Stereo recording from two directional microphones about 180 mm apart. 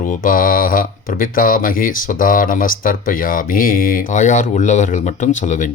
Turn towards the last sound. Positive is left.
turn(degrees=45)  # may be behind; listen again after turning